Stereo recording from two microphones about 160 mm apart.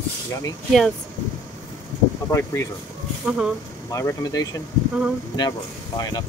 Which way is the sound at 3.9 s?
20° left (ahead or behind).